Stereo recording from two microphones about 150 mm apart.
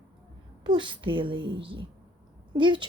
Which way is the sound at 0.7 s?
30° right (ahead or behind).